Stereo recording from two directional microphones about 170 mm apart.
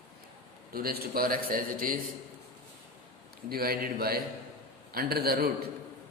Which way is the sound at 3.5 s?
65° right (ahead or behind).